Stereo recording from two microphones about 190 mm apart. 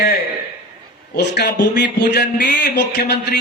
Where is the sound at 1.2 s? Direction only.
65° left (ahead or behind).